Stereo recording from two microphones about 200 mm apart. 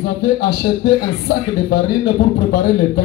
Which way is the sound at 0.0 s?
50° left (ahead or behind).